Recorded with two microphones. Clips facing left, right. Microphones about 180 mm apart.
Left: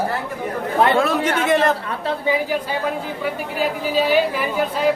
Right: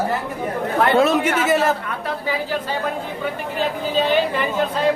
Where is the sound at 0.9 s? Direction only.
20° right (ahead or behind).